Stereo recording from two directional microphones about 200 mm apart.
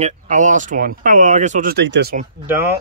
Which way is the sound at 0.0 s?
40° right (ahead or behind).